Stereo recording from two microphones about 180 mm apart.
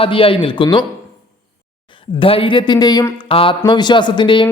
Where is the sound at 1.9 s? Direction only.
30° left (ahead or behind).